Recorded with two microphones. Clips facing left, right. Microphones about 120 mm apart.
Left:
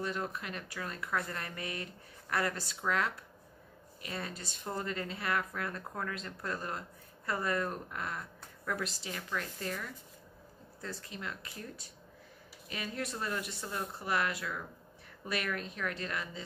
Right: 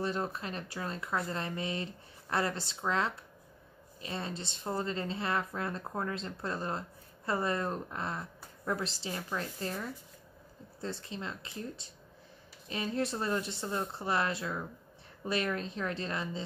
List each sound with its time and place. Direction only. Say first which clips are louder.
0.0 s speech: right 3 dB; 30° right (ahead or behind)